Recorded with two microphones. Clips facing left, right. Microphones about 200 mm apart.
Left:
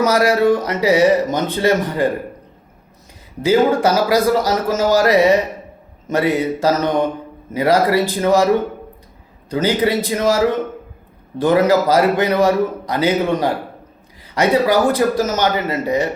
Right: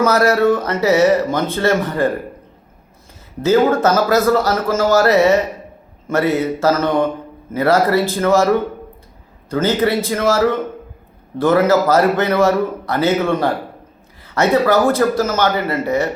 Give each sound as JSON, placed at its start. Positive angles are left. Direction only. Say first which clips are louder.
{"t": 0.0, "sound": "a man's voice", "louder": "right 1 dB", "side_deg": 15}
{"t": 3.4, "sound": "a man's voice", "louder": "right 1 dB", "side_deg": 10}
{"t": 9.5, "sound": "a man's voice", "louder": "right 1 dB", "side_deg": 15}